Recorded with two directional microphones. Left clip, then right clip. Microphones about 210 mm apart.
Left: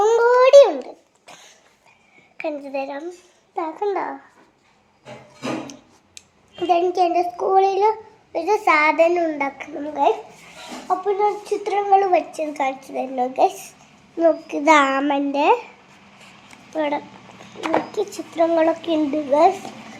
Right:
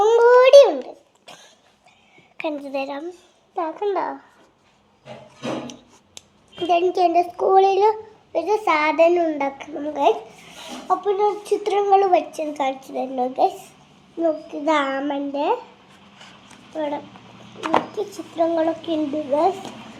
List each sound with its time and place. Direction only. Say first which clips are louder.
0.2 s a sound: right 1 dB; 15° right (ahead or behind)
0.6 s dog: left 1 dB; 5° left (ahead or behind)
2.4 s a child's voice: even; 10° right (ahead or behind)
3.5 s speech: even; 5° left (ahead or behind)
6.7 s a child's voice: even; centre (ahead or behind)
8.3 s speech: left 2 dB; 5° left (ahead or behind)
14.2 s a child's voice: left 4 dB; 40° left (ahead or behind)
16.7 s a child's voice: left 3 dB; 40° left (ahead or behind)